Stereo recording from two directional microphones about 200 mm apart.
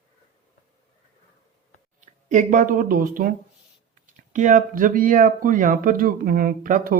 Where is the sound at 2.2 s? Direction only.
40° right (ahead or behind).